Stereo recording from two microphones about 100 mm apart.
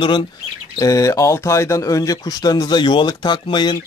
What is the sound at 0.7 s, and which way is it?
Speech, 35° left (ahead or behind).